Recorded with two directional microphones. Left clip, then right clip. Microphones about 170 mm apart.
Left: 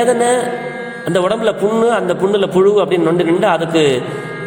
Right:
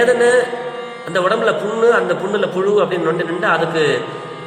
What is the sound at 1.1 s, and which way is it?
A man's voice, 35° left (ahead or behind).